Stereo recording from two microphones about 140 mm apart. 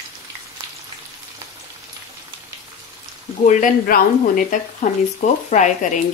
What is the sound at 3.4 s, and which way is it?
Speech, 80° left.